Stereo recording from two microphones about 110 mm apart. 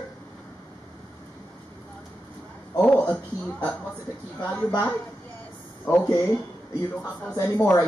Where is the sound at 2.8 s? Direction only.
15° left (ahead or behind).